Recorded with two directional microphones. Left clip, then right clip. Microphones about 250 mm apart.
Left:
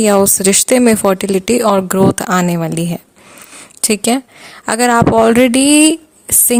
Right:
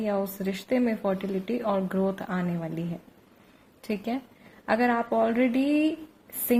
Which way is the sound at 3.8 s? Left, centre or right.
Left.